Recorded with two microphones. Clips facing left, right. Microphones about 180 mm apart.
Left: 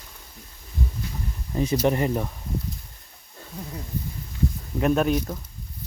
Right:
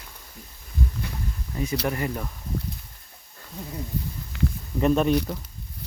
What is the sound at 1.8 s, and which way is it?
Speech, 25° left (ahead or behind).